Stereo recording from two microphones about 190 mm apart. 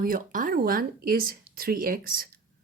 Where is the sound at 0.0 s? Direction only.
45° right (ahead or behind).